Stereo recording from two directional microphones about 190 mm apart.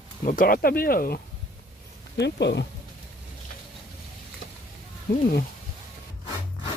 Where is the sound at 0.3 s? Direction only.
45° left (ahead or behind).